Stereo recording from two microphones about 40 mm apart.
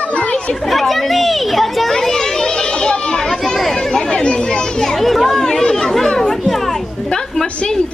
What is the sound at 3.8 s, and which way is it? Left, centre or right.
Speech, centre.